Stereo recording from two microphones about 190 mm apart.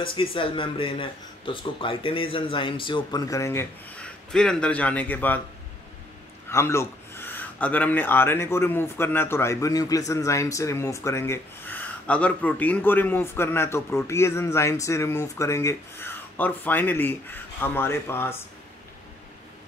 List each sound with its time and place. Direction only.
0.0 s speech: 25° left (ahead or behind); by 5.4 s 10° left (ahead or behind)
6.5 s speech: 15° left (ahead or behind)